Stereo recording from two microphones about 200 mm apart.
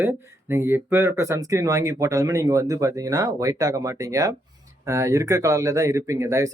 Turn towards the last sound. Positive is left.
turn(degrees=-15)  # may be behind; listen again after turning